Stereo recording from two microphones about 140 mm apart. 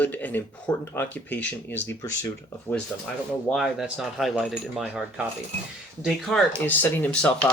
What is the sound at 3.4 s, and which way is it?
Speech, centre (ahead or behind).